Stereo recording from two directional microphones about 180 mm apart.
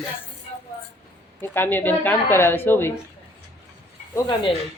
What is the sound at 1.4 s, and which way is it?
A woman's voice, 10° left (ahead or behind).